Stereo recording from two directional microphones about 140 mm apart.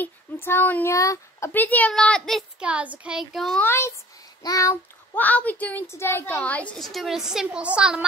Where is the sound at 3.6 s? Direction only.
15° left (ahead or behind).